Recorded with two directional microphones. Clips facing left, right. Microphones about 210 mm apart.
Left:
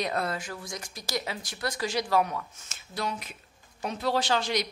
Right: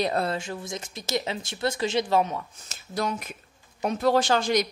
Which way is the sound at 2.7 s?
45° right (ahead or behind).